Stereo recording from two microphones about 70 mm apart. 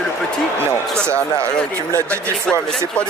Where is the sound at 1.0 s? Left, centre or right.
Centre.